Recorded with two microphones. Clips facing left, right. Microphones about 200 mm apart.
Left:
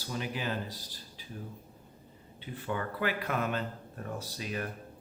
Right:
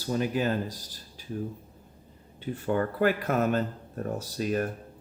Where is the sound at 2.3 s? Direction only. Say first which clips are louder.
Right 8 dB; 45° right (ahead or behind).